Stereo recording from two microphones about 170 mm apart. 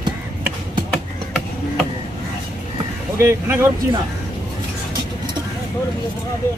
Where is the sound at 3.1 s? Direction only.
15° right (ahead or behind).